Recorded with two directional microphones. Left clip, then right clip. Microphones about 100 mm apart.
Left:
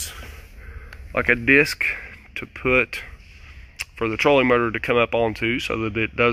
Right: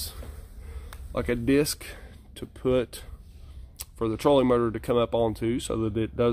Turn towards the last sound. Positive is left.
turn(degrees=-25)  # may be behind; listen again after turning